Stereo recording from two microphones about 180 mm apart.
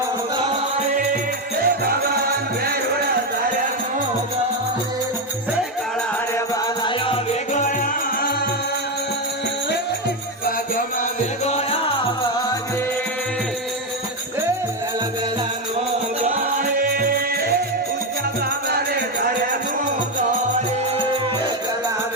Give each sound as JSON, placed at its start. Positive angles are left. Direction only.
{"t": 1.6, "sound": "music", "side_deg": -55}
{"t": 11.4, "sound": "music", "side_deg": 35}
{"t": 16.2, "sound": "music", "side_deg": -35}
{"t": 16.7, "sound": "music", "side_deg": -55}